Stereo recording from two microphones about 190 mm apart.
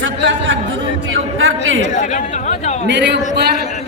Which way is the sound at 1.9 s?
40° left (ahead or behind).